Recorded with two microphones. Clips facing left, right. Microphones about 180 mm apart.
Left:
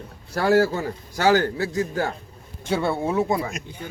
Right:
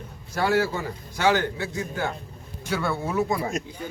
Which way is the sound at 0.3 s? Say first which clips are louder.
Left 4 dB; 40° left (ahead or behind).